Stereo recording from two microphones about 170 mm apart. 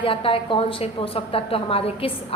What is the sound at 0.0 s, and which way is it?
A woman's voice, 30° left (ahead or behind).